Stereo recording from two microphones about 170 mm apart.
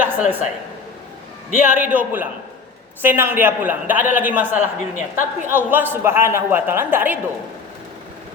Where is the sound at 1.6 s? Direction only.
10° right (ahead or behind).